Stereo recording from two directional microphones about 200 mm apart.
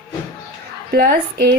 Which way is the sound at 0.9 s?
50° right (ahead or behind).